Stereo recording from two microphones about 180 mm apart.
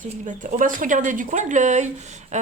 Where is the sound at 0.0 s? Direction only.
45° right (ahead or behind).